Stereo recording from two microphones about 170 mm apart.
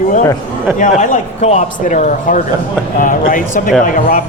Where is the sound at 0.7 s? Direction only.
50° left (ahead or behind).